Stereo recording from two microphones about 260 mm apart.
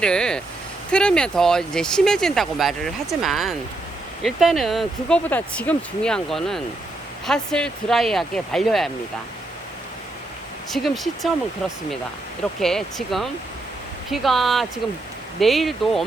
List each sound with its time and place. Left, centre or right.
0.0 s vehicle: centre
0.9 s speech: centre
10.7 s speech: centre
12.5 s speech: centre